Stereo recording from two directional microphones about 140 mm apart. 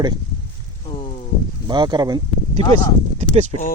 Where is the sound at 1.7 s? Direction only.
30° right (ahead or behind).